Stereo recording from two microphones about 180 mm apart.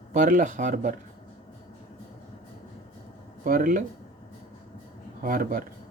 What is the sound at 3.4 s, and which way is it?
Speech, 50° right (ahead or behind).